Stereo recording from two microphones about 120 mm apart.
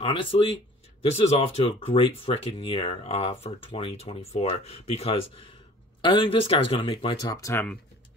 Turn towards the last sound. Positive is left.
turn(degrees=25)  # may be behind; listen again after turning